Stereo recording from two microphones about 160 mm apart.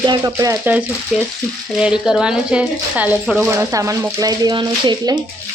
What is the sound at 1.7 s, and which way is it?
Speech, 5° right (ahead or behind).